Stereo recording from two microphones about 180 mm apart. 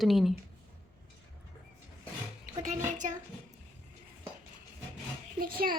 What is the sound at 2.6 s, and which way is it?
Speech, 45° right (ahead or behind).